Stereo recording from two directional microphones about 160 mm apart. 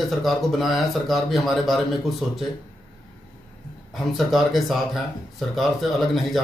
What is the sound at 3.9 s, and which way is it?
Speech, centre (ahead or behind).